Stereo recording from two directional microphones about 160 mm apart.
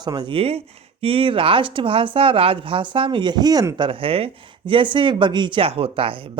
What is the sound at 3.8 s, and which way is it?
Speech, 35° right (ahead or behind).